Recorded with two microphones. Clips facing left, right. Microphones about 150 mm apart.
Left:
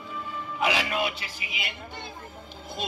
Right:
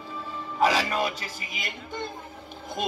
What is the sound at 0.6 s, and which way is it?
Speech, 40° right (ahead or behind).